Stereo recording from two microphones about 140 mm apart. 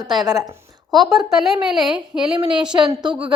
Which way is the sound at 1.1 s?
5° right (ahead or behind).